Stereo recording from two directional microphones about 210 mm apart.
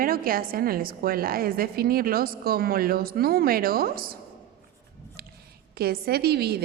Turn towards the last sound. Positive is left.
turn(degrees=-50)  # may be behind; listen again after turning